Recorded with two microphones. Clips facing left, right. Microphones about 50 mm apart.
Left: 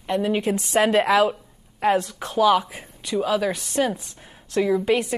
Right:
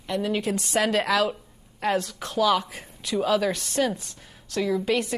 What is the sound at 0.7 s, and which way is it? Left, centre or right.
Speech, left.